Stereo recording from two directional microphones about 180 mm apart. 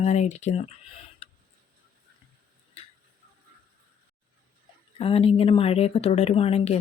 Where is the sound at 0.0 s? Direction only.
40° left (ahead or behind).